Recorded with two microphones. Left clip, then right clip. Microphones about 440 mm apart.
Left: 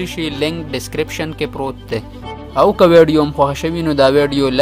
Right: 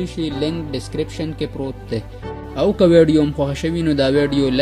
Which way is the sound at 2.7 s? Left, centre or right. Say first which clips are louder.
Left 2 dB; centre.